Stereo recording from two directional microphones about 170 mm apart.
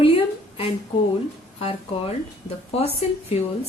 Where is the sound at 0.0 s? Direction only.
35° left (ahead or behind).